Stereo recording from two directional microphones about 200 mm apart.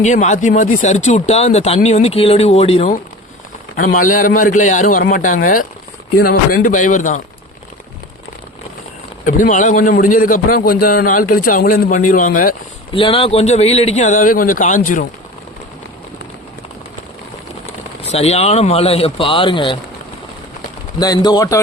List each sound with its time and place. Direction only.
0.0 s speech: 35° left (ahead or behind)
3.8 s a man's voice: 45° left (ahead or behind)
9.2 s a man's voice: 40° left (ahead or behind)
12.9 s speech: 25° left (ahead or behind)
18.0 s speech: 30° left (ahead or behind)
21.0 s speech: 20° left (ahead or behind)